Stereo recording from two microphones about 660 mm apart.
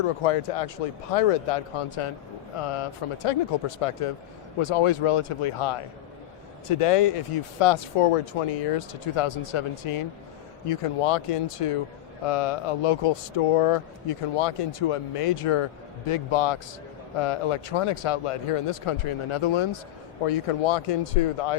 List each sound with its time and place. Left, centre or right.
0.0 s speech: left